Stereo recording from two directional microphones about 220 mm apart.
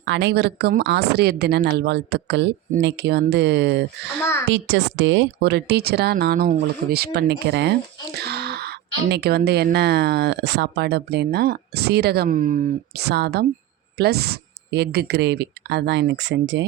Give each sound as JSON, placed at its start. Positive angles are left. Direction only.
{"t": 0.0, "sound": "speech", "side_deg": -55}